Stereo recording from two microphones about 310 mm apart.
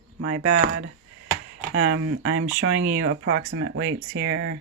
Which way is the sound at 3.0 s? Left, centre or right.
Right.